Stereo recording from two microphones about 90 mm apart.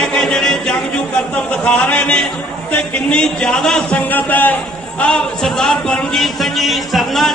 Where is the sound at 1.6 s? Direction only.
15° left (ahead or behind).